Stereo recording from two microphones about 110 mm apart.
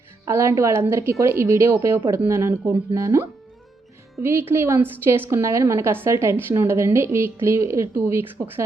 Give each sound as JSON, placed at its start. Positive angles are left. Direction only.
{"t": 0.3, "sound": "a woman's voice", "side_deg": -25}